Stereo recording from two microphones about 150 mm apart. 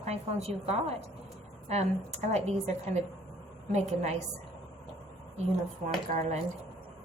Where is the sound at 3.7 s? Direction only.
50° right (ahead or behind).